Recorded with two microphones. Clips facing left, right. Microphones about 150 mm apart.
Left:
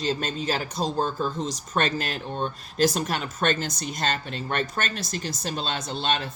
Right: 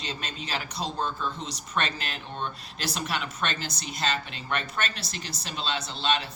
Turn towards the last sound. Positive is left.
turn(degrees=50)  # may be behind; listen again after turning